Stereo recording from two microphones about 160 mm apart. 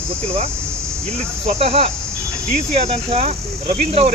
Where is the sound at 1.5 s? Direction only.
40° right (ahead or behind).